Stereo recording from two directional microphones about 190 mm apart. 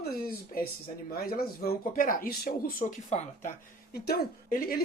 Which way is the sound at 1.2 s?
55° left (ahead or behind).